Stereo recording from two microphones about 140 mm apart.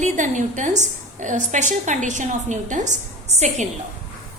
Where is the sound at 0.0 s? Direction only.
60° right (ahead or behind).